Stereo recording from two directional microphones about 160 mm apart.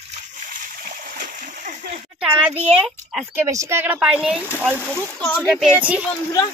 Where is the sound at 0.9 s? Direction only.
65° right (ahead or behind).